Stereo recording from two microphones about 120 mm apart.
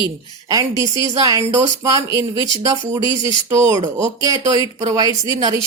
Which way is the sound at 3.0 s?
45° left (ahead or behind).